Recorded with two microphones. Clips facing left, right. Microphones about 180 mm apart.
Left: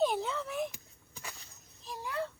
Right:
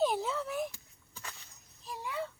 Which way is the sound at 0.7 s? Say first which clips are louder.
Left 2 dB; 15° left (ahead or behind).